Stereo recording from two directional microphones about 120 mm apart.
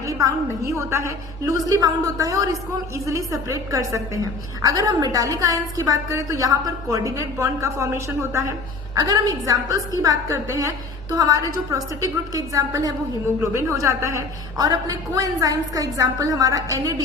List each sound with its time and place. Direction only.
0.0 s a woman's voice: 25° right (ahead or behind)